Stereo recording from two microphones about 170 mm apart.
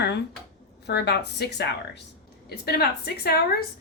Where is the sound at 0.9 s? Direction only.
75° left (ahead or behind).